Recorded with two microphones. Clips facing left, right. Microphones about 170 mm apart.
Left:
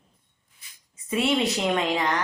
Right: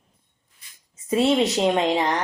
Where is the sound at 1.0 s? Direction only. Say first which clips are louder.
Right 4 dB; 30° right (ahead or behind).